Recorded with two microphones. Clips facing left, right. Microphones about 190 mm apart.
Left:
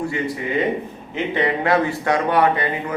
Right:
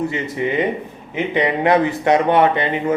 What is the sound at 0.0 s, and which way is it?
Speech, 20° right (ahead or behind).